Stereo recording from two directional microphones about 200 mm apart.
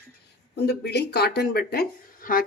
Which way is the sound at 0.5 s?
55° left (ahead or behind).